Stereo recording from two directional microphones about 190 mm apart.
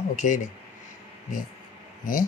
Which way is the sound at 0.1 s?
40° left (ahead or behind).